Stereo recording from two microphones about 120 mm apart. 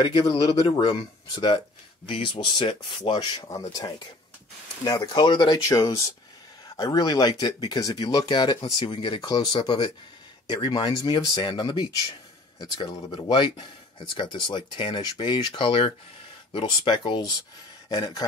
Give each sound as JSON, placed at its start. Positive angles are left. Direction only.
{"t": 0.0, "sound": "speech", "side_deg": 40}
{"t": 3.3, "sound": "speech", "side_deg": 30}
{"t": 4.8, "sound": "speech", "side_deg": 35}
{"t": 5.6, "sound": "a man's voice", "side_deg": 25}